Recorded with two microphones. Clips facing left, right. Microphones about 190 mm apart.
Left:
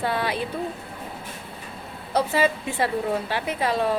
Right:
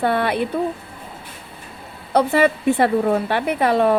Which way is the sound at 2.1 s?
60° right (ahead or behind).